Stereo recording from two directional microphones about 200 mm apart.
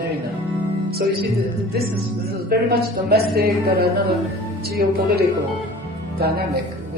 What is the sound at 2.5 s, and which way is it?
Speech, 50° right (ahead or behind).